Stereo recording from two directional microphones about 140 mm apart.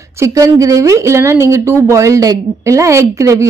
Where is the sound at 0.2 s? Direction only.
25° right (ahead or behind).